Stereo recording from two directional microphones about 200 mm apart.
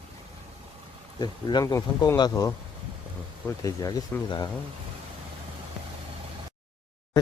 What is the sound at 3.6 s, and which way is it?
Speech, 20° left (ahead or behind).